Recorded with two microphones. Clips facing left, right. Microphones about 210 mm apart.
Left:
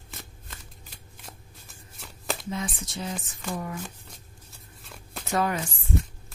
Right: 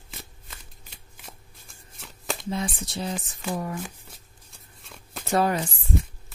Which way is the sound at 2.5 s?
35° right (ahead or behind).